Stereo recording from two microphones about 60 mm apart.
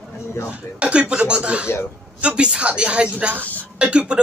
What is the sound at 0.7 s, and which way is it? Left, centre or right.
A woman's voice, centre.